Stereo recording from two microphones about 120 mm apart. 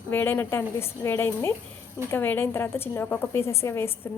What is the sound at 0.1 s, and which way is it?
A woman's voice, 15° left (ahead or behind).